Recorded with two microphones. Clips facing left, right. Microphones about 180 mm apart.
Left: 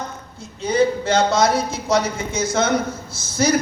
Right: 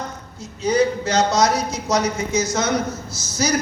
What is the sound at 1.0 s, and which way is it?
Speech, 55° left (ahead or behind).